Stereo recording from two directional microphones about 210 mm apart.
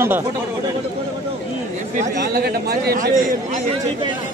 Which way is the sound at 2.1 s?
45° right (ahead or behind).